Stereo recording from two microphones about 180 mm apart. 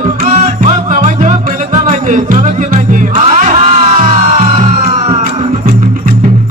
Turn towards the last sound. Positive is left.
turn(degrees=-35)  # may be behind; listen again after turning